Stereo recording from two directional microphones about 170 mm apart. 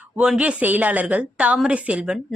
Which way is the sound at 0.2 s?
5° right (ahead or behind).